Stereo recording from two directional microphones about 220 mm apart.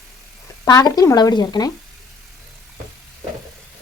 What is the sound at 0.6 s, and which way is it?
A woman's voice, 15° left (ahead or behind).